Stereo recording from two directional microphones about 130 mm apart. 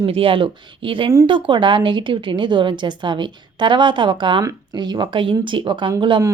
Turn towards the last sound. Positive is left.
turn(degrees=-40)  # may be behind; listen again after turning